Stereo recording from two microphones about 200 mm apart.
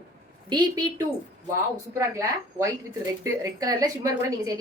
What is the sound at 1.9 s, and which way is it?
A woman's voice, 15° right (ahead or behind).